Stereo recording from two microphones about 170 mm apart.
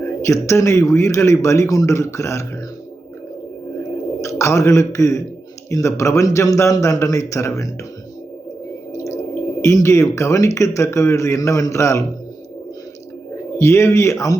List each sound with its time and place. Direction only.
0.2 s a man's voice: 15° left (ahead or behind)
4.2 s a man's voice: 15° left (ahead or behind)
9.6 s a man's voice: 15° left (ahead or behind)
13.6 s a man's voice: 15° left (ahead or behind)